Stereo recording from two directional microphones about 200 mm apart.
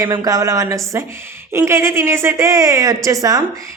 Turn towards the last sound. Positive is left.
turn(degrees=-15)  # may be behind; listen again after turning